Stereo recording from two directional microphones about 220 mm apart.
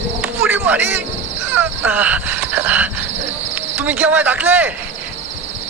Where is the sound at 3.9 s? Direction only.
10° right (ahead or behind).